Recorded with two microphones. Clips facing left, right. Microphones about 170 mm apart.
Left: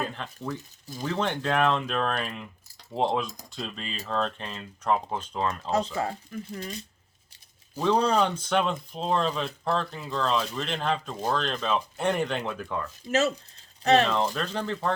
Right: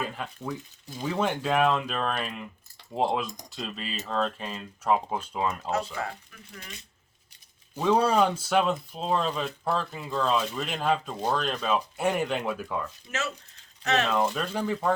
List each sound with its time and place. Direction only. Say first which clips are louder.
0.2 s speech: even; 5° right (ahead or behind)
5.7 s speech: left 3 dB; 30° left (ahead or behind)
7.8 s speech: right 1 dB; 5° right (ahead or behind)
13.1 s speech: left 12 dB; 35° left (ahead or behind)
14.1 s speech: right 1 dB; 10° right (ahead or behind)